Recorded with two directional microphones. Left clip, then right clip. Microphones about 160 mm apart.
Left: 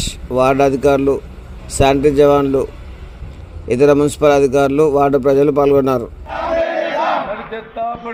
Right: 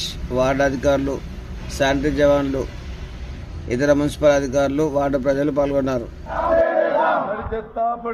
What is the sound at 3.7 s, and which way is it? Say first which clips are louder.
Speech: left 7 dB; 35° left (ahead or behind).